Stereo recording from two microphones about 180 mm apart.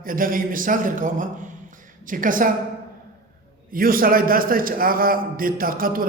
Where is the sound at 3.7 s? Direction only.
50° right (ahead or behind).